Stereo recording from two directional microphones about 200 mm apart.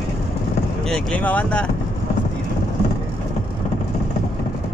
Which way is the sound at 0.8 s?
5° left (ahead or behind).